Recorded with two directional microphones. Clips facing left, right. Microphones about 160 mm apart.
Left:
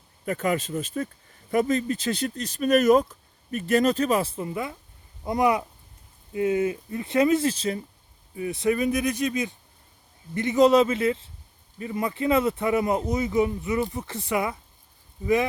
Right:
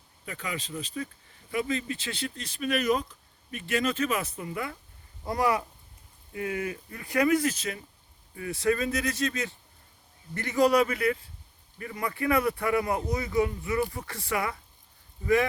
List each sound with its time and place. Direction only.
0.3 s speech: 50° left (ahead or behind); by 7.8 s 30° left (ahead or behind)
8.4 s speech: 20° left (ahead or behind)